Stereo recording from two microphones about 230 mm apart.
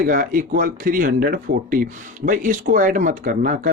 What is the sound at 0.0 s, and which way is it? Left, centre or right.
Speech, right.